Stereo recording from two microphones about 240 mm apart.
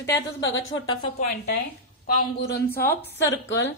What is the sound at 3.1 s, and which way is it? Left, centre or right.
Speech, left.